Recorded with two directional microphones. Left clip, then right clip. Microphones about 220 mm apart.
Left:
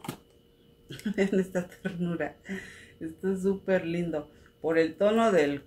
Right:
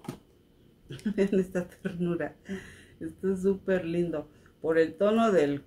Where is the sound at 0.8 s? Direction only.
5° right (ahead or behind).